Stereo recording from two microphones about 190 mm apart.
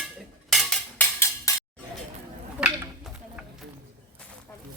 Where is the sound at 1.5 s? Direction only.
15° left (ahead or behind).